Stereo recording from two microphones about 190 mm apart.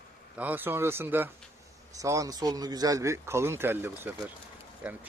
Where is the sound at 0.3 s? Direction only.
10° right (ahead or behind).